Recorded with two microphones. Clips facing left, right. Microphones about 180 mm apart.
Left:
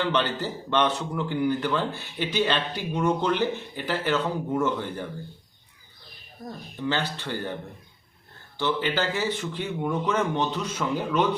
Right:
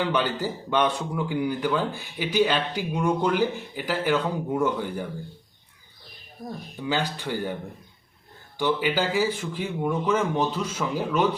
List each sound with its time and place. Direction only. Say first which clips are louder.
0.0 s a man's voice: right 1 dB; 10° right (ahead or behind)
6.7 s a man's voice: even; 10° right (ahead or behind)
8.5 s a man's voice: right 2 dB; 10° right (ahead or behind)